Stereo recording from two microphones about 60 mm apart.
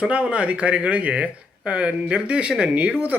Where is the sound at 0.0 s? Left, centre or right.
Centre.